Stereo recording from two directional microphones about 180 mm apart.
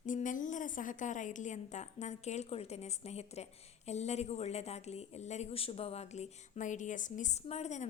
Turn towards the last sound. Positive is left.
turn(degrees=40)  # may be behind; listen again after turning